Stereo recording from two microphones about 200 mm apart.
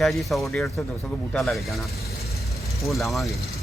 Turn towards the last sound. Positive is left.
turn(degrees=0)  # may be behind; listen again after turning